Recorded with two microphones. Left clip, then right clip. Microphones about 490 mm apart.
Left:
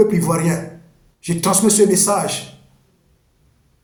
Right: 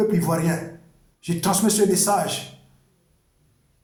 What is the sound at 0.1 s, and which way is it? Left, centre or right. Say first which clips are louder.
A man's voice: left 4 dB; right.